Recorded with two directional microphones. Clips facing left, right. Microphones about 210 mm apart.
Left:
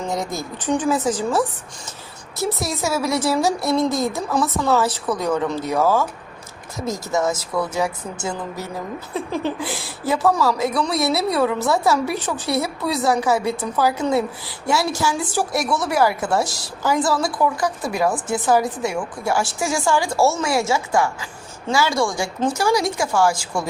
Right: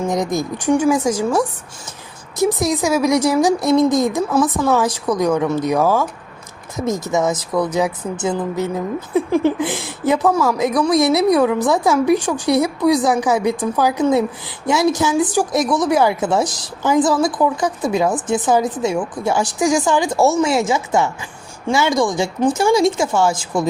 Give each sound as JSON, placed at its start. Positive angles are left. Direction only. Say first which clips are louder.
{"t": 0.1, "sound": "a woman's voice", "louder": "right 6 dB", "side_deg": -15}